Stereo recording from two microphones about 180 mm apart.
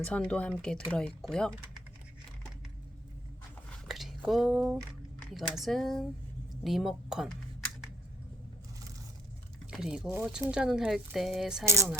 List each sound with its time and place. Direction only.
0.0 s a woman's voice: 5° left (ahead or behind)
3.7 s squish: centre (ahead or behind)
5.3 s a woman's voice: centre (ahead or behind)
9.6 s a woman's voice: 5° right (ahead or behind)
11.6 s speech: 15° right (ahead or behind)